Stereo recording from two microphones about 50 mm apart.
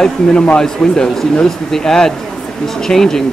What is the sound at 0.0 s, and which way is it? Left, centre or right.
Speech, centre.